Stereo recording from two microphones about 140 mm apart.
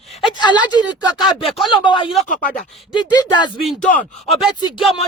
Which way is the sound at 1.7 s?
35° left (ahead or behind).